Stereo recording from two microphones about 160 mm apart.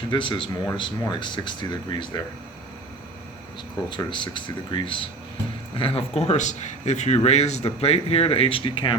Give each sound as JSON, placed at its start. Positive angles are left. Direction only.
{"t": 0.1, "sound": "speech", "side_deg": 30}
{"t": 3.8, "sound": "speech", "side_deg": 30}